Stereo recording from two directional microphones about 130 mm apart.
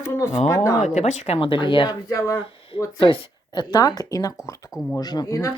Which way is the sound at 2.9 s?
35° left (ahead or behind).